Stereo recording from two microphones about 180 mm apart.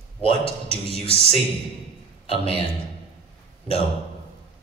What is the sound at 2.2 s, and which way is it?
Speech, 30° left (ahead or behind).